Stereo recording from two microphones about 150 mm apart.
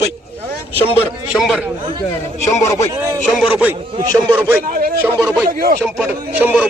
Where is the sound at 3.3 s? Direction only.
5° right (ahead or behind).